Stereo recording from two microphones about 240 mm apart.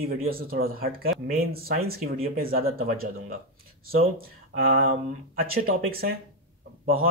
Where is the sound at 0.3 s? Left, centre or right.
Right.